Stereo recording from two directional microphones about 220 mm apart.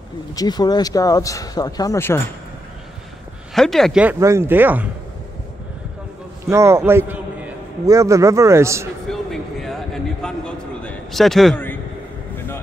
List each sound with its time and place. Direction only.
0.4 s speech: 20° left (ahead or behind)
3.5 s speech: centre (ahead or behind)
6.5 s a man's voice: 10° right (ahead or behind)
9.0 s a sound: centre (ahead or behind)